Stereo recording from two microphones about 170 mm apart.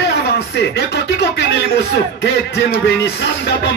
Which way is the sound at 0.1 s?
80° left.